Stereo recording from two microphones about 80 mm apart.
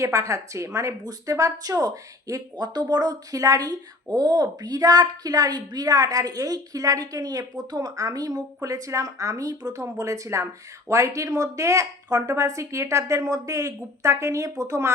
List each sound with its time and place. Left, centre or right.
0.0 s a woman's voice: right